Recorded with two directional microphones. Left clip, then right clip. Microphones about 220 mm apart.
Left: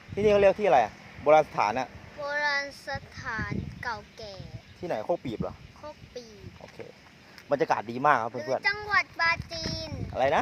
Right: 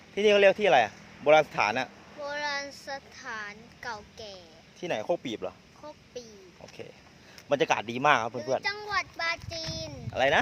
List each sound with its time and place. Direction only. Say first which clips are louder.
0.2 s speech: even; 5° left (ahead or behind)
2.2 s speech: left 4 dB; 10° right (ahead or behind)
4.8 s speech: even; 5° left (ahead or behind)
6.2 s speech: right 1 dB; 5° right (ahead or behind)
7.5 s a child's voice: even; 5° left (ahead or behind)